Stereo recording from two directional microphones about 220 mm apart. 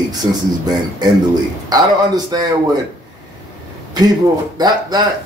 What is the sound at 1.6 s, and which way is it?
Speech, 20° right (ahead or behind).